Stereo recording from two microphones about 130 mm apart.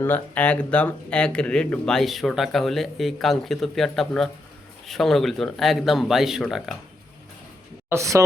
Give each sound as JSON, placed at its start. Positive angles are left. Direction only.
{"t": 0.0, "sound": "speech", "side_deg": 15}
{"t": 7.9, "sound": "speech", "side_deg": -25}